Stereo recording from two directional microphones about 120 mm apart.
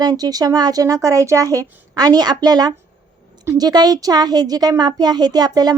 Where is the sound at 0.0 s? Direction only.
35° right (ahead or behind).